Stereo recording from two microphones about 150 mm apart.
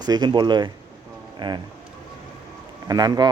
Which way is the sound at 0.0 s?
30° right (ahead or behind).